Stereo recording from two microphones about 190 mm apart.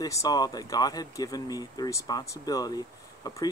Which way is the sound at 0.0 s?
20° left (ahead or behind).